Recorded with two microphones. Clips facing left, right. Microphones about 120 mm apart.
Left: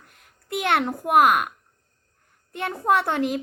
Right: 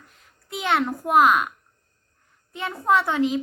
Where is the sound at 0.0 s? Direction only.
60° left (ahead or behind).